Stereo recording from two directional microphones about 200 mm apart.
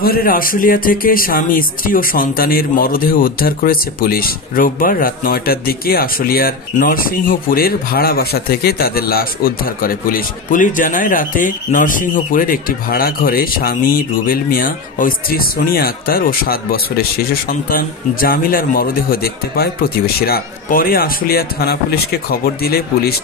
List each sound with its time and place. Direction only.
0.0 s speech: 45° left (ahead or behind)